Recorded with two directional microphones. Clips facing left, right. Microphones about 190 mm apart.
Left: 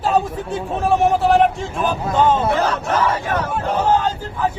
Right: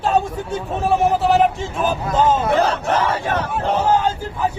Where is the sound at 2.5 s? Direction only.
30° right (ahead or behind).